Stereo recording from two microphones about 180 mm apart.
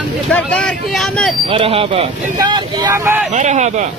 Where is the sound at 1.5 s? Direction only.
30° right (ahead or behind).